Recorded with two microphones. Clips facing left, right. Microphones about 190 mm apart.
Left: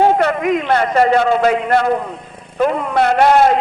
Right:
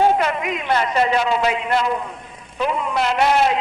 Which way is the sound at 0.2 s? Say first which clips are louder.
Left 7 dB; 55° left (ahead or behind).